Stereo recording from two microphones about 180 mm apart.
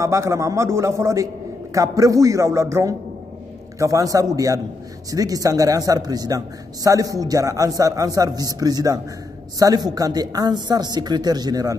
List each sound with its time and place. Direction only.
0.0 s a man's voice: 15° right (ahead or behind)